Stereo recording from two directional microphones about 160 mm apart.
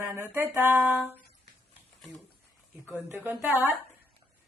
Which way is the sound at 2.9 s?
15° right (ahead or behind).